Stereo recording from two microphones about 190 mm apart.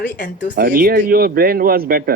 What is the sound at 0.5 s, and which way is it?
Speech, 50° right (ahead or behind).